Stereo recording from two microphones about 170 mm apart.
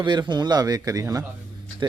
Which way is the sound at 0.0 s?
25° right (ahead or behind).